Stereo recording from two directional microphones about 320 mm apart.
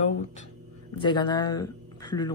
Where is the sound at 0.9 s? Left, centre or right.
Centre.